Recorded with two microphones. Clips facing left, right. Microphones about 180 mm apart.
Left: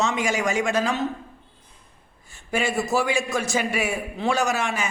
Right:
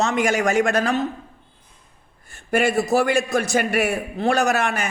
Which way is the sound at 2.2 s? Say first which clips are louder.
Right 5 dB; 60° right (ahead or behind).